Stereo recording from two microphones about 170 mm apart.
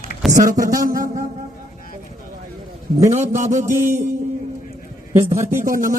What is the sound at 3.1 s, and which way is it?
Speech, 45° right (ahead or behind).